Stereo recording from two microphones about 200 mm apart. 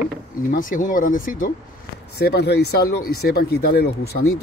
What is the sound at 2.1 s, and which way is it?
Speech, 55° left (ahead or behind).